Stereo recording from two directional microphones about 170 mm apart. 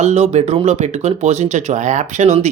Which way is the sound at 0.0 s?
40° right (ahead or behind).